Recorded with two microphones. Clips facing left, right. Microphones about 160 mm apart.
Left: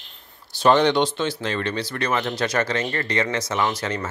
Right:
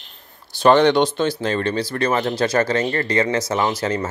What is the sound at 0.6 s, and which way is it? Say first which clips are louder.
Speech: right 3 dB; 55° right (ahead or behind).